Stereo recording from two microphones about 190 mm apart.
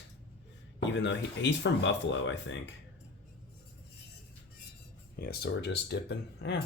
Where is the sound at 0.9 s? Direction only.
70° left (ahead or behind).